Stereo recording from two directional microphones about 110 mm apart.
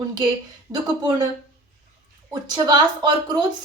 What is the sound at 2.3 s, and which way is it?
A woman's voice, 40° right (ahead or behind).